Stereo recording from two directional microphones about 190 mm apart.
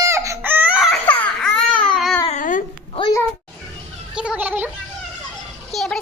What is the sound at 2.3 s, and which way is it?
Babbling, 45° left (ahead or behind).